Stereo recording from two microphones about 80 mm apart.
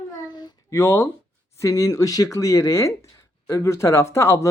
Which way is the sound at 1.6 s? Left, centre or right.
Left.